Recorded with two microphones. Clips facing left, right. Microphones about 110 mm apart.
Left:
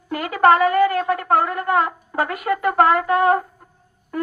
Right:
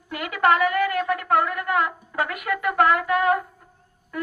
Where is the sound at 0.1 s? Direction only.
35° left (ahead or behind).